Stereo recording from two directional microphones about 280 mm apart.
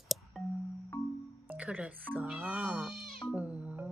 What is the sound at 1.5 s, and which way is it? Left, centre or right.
Speech, centre.